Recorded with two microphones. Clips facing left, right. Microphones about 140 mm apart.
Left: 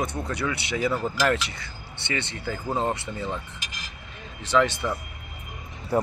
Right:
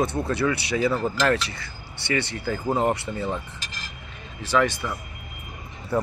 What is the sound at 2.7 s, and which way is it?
Speech, 15° right (ahead or behind).